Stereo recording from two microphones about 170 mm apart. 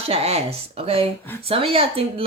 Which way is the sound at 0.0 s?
35° right (ahead or behind).